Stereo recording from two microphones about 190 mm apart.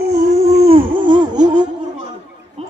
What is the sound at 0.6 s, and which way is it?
Wail, 25° right (ahead or behind).